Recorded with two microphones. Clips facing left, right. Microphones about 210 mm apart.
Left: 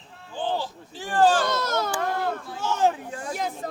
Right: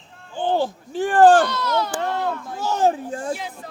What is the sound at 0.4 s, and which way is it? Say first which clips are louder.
Speech: right 7 dB; 55° right (ahead or behind).